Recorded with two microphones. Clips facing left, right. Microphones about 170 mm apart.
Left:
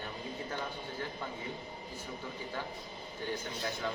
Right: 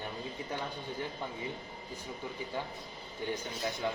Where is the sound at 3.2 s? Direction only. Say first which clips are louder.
Right 2 dB; 15° right (ahead or behind).